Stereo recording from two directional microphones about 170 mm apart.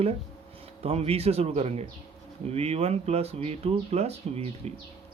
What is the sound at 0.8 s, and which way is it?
Speech, 35° right (ahead or behind).